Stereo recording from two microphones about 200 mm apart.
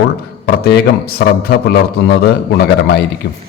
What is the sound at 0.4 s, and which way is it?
A man's voice, 50° left (ahead or behind).